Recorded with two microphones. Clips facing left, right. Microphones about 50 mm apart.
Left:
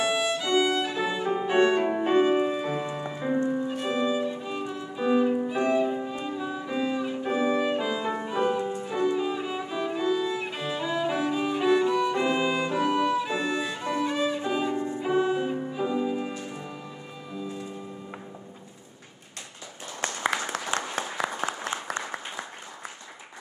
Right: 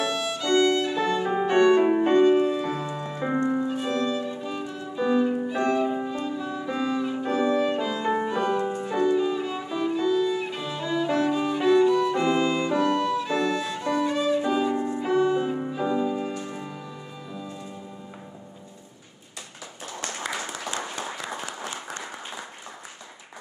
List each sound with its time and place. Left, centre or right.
0.0 s violin: centre
1.5 s music: centre
1.8 s music: centre
2.0 s music: centre
3.3 s music: right
3.8 s music: centre
6.0 s violin: centre
8.3 s music: centre
8.9 s violin: centre
15.0 s music: centre
20.7 s applause: left